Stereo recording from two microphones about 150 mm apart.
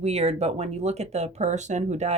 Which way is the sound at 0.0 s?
45° right (ahead or behind).